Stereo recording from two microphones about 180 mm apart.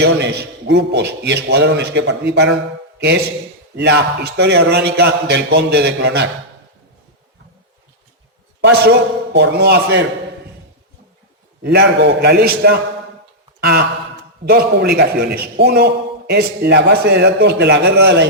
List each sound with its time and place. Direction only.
0.0 s a man's voice: 70° right (ahead or behind)
3.8 s a man's voice: 70° right (ahead or behind)
8.6 s a man's voice: 70° right (ahead or behind)
11.6 s a man's voice: 65° right (ahead or behind)